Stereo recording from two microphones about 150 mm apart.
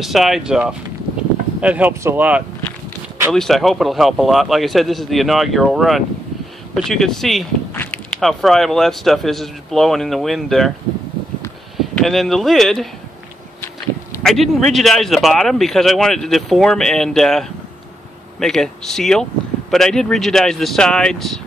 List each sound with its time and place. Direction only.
0.0 s speech: centre (ahead or behind)
3.3 s speech: centre (ahead or behind)
7.7 s a sound: 15° left (ahead or behind)
8.2 s speech: centre (ahead or behind)
11.8 s speech: centre (ahead or behind)
14.2 s speech: centre (ahead or behind)